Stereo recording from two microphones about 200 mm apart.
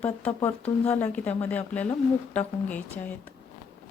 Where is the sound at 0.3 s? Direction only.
10° left (ahead or behind).